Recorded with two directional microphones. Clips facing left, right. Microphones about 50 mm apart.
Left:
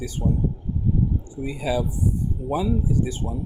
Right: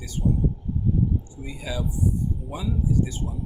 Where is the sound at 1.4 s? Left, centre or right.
Left.